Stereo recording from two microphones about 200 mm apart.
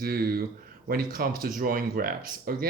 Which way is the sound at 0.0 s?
50° right (ahead or behind).